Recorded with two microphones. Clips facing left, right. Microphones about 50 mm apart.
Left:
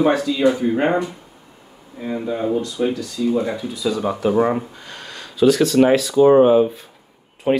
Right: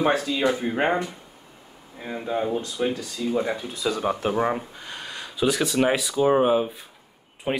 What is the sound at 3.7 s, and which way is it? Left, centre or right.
Speech, right.